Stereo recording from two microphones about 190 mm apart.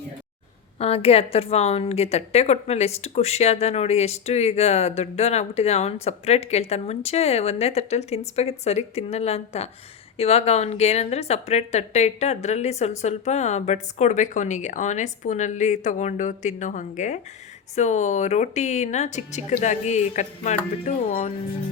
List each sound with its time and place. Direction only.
0.8 s a woman's voice: 30° left (ahead or behind)